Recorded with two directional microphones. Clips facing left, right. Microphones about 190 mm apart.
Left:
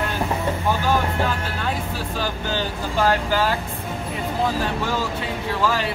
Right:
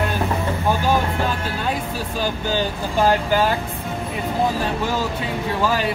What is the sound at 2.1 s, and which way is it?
Vehicle, 15° right (ahead or behind).